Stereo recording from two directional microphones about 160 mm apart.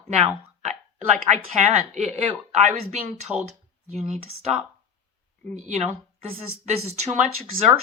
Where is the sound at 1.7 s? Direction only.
45° right (ahead or behind).